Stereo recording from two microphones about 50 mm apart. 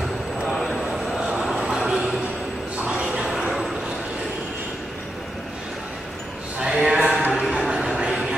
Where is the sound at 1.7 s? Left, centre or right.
Centre.